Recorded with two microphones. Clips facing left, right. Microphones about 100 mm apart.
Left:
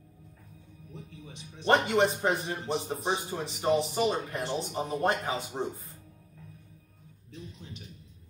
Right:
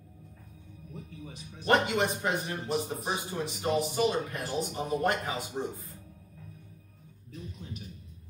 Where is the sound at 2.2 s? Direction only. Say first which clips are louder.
Left 2 dB; 30° left (ahead or behind).